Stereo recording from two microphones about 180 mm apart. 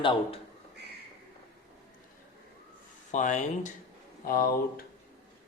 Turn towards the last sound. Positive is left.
turn(degrees=55)  # may be behind; listen again after turning